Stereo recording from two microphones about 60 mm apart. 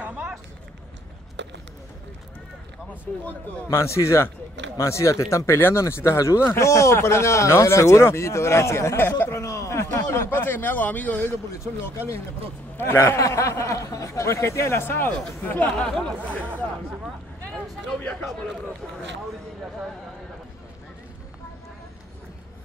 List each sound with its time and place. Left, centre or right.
0.0 s a sound: centre
3.1 s a man's voice: left
3.7 s speech: left
5.6 s speech: left
9.3 s speech: left
13.0 s speech: left
15.9 s speech: centre